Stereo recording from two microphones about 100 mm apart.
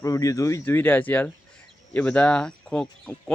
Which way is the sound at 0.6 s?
20° left (ahead or behind).